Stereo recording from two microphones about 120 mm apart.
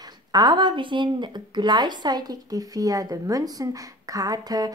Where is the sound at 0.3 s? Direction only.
35° right (ahead or behind).